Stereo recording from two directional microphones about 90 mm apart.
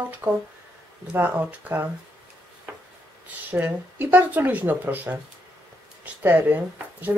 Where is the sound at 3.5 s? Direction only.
20° right (ahead or behind).